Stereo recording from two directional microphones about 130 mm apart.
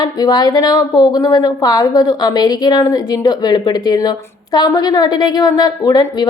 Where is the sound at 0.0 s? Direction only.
30° left (ahead or behind).